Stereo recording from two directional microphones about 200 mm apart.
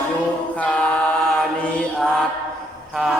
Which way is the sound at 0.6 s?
5° left (ahead or behind).